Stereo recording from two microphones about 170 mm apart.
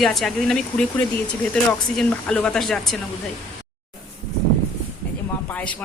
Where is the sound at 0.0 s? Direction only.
Centre (ahead or behind).